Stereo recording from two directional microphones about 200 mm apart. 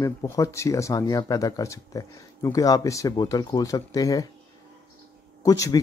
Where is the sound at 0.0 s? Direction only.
15° left (ahead or behind).